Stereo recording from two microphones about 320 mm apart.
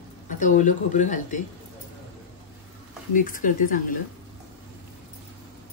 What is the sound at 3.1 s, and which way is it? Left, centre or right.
Speech, left.